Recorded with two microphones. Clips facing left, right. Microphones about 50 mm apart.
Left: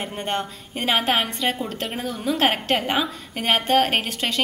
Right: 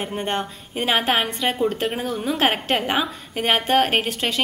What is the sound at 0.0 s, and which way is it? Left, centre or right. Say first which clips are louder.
A woman's voice: right 2 dB; centre.